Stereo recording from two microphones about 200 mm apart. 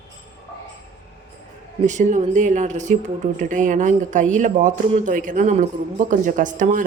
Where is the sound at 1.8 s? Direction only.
40° right (ahead or behind).